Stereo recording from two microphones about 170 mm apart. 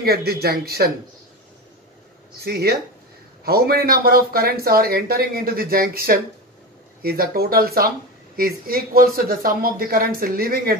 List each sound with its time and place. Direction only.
0.0 s speech: 65° right (ahead or behind)
2.4 s speech: 65° right (ahead or behind)